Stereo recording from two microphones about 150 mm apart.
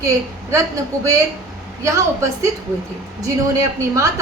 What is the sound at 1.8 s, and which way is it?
Speech, 20° right (ahead or behind).